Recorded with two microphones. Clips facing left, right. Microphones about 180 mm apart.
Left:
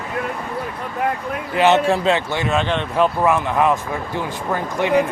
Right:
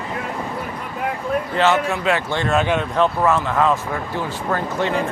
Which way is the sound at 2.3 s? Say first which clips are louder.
Even; 10° left (ahead or behind).